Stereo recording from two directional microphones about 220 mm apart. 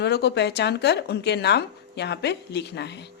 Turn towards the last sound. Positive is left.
turn(degrees=50)  # may be behind; listen again after turning